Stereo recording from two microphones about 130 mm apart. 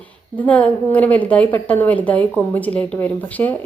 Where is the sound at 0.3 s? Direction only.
10° left (ahead or behind).